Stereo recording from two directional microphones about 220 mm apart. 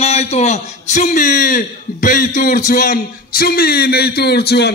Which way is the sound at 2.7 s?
40° left (ahead or behind).